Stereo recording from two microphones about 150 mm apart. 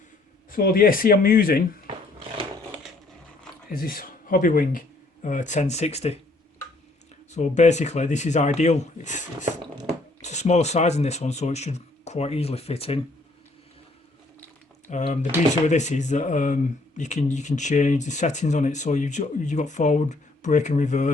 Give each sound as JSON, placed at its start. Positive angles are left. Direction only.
{"t": 0.5, "sound": "speech", "side_deg": 75}
{"t": 3.7, "sound": "speech", "side_deg": 75}
{"t": 7.3, "sound": "speech", "side_deg": 50}
{"t": 14.8, "sound": "speech", "side_deg": 50}